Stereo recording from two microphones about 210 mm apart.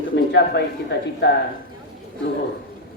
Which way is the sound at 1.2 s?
55° left (ahead or behind).